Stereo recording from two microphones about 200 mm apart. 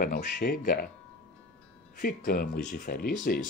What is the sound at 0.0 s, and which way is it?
Speech, 45° left (ahead or behind).